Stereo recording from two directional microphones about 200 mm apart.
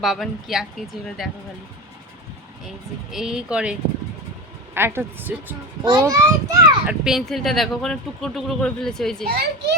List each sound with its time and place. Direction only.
0.0 s speech: centre (ahead or behind)
2.6 s a woman's voice: centre (ahead or behind); by 6.6 s 15° right (ahead or behind)
6.8 s speech: centre (ahead or behind)
9.2 s a child's voice: 55° right (ahead or behind)